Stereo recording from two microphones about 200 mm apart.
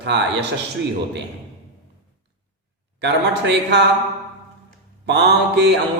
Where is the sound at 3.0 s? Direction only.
60° right (ahead or behind).